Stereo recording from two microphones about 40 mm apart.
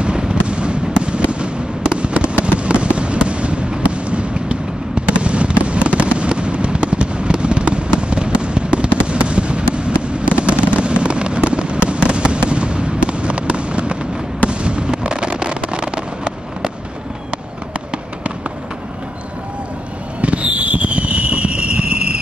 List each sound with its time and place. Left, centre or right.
0.0 s fireworks: right
20.2 s fireworks: right